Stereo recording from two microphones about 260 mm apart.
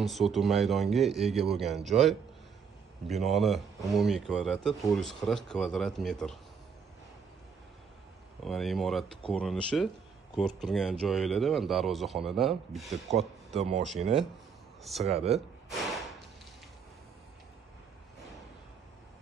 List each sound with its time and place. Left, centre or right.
0.0 s speech: centre
8.5 s speech: centre
13.6 s speech: right
14.8 s speech: centre
15.0 s speech: right